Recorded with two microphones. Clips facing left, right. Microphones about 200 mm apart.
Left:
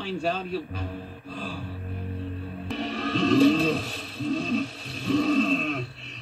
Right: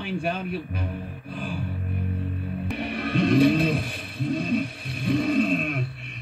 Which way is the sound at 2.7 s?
15° right (ahead or behind).